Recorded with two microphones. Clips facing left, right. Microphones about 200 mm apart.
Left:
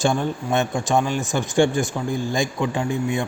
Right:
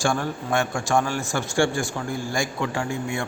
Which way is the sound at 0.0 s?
20° left (ahead or behind).